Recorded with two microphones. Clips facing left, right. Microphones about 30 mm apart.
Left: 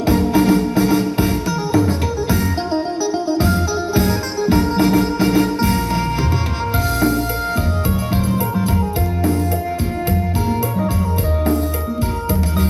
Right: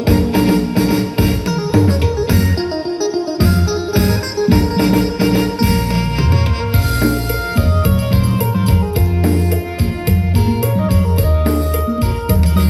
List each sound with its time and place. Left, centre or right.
0.0 s music: right